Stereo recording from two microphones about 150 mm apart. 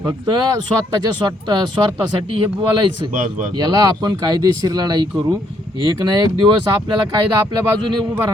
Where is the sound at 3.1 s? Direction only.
60° right (ahead or behind).